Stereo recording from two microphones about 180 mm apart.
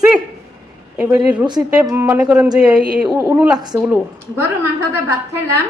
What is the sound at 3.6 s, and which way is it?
Speech, 20° right (ahead or behind).